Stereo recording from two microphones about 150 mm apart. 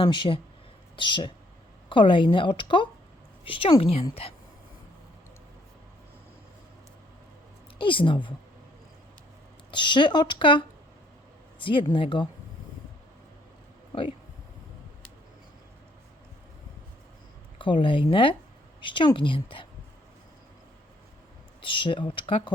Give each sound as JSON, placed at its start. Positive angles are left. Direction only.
{"t": 0.0, "sound": "speech", "side_deg": 30}
{"t": 7.8, "sound": "speech", "side_deg": 35}
{"t": 9.7, "sound": "speech", "side_deg": 30}
{"t": 17.6, "sound": "speech", "side_deg": 35}
{"t": 21.6, "sound": "speech", "side_deg": 35}